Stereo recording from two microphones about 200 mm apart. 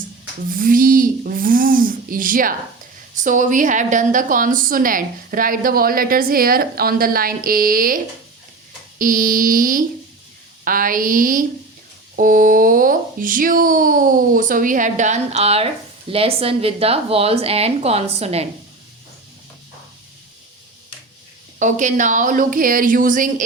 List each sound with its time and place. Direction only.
0.5 s a woman's voice: 45° right (ahead or behind)
21.6 s speech: 40° right (ahead or behind)